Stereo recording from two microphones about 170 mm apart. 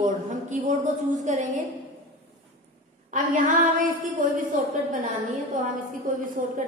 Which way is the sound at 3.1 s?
50° right (ahead or behind).